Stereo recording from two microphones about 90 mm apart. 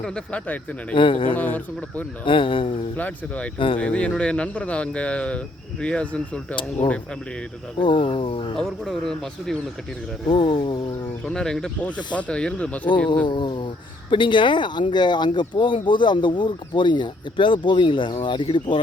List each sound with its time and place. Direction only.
0.0 s speech: 10° left (ahead or behind)
0.9 s speech: 70° left (ahead or behind)
1.3 s speech: 20° left (ahead or behind)
2.2 s speech: 70° left (ahead or behind)
3.0 s speech: 15° left (ahead or behind)
7.8 s speech: 70° left (ahead or behind)
8.5 s speech: 5° left (ahead or behind)
10.2 s speech: 75° left (ahead or behind)
11.3 s speech: 5° left (ahead or behind)
13.2 s speech: 65° left (ahead or behind)